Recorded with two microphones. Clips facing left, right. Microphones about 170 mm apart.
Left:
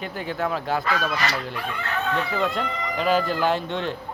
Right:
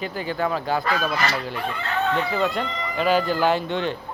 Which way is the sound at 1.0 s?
35° right (ahead or behind).